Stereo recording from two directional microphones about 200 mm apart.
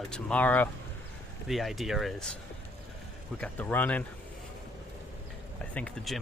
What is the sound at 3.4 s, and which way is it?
Speech, 10° left (ahead or behind).